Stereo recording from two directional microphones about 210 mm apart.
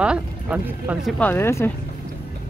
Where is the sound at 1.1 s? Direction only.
10° left (ahead or behind).